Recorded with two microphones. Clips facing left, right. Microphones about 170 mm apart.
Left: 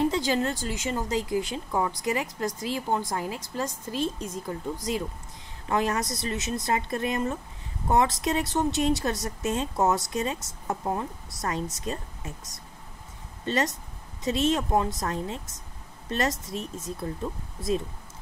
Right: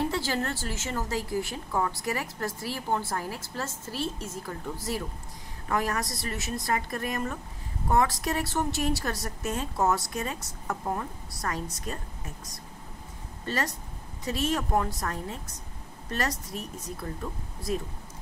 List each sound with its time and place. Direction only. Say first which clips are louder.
0.0 s speech: left 4 dB; 20° left (ahead or behind)
13.5 s speech: left 4 dB; 20° left (ahead or behind)